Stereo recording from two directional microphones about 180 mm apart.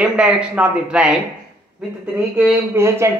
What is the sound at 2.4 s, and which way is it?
Speech, 10° right (ahead or behind).